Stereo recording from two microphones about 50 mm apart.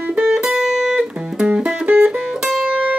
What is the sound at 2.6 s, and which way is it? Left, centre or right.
Music, right.